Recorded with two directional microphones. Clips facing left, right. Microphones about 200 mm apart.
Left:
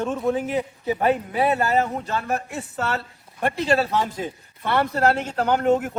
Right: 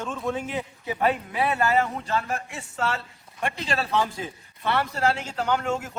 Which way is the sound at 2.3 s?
55° left (ahead or behind).